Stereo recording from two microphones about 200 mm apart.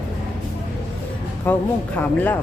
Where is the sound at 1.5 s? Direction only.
10° left (ahead or behind).